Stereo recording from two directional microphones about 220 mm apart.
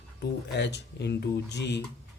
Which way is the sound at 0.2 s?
50° left (ahead or behind).